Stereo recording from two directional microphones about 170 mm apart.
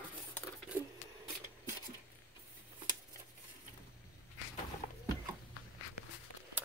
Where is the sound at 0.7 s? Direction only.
15° right (ahead or behind).